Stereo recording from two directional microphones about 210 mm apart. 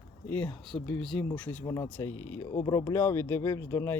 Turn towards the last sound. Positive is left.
turn(degrees=10)  # may be behind; listen again after turning